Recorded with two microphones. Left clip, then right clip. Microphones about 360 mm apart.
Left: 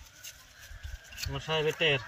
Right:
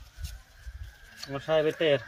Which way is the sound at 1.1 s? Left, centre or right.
Centre.